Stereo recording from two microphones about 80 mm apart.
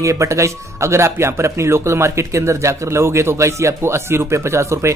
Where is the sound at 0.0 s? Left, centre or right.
Right.